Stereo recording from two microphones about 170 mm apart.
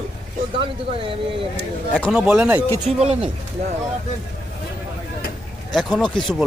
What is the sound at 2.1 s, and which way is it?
Speech, 5° right (ahead or behind).